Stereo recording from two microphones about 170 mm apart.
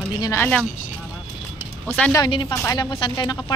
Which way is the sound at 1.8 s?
10° left (ahead or behind).